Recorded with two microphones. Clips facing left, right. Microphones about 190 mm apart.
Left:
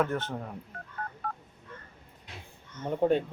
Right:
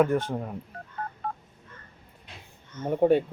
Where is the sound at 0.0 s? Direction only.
10° right (ahead or behind).